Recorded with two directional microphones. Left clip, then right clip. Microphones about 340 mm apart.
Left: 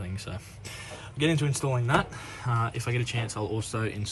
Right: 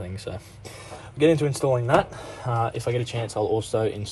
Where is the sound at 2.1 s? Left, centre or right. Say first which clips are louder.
Right 4 dB; right.